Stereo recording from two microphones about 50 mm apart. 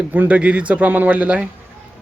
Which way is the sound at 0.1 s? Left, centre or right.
Right.